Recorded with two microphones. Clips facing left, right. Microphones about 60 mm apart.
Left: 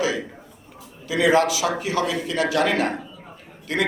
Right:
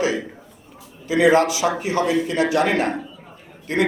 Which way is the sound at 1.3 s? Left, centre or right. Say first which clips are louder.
Right 1 dB; right.